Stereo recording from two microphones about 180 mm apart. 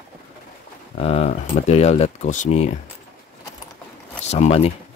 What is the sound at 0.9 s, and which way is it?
Speech, 35° left (ahead or behind).